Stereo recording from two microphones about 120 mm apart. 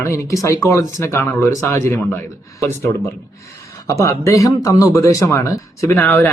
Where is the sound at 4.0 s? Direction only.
25° left (ahead or behind).